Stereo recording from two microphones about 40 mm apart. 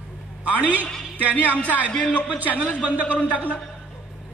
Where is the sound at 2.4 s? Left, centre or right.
Right.